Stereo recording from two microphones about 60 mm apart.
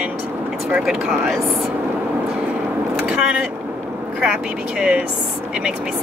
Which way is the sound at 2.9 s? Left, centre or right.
Centre.